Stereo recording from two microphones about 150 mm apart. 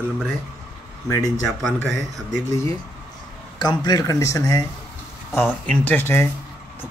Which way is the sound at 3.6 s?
25° left (ahead or behind).